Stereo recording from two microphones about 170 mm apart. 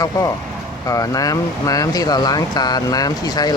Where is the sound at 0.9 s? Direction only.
20° left (ahead or behind).